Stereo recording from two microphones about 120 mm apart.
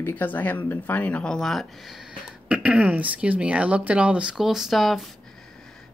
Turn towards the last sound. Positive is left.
turn(degrees=0)  # may be behind; listen again after turning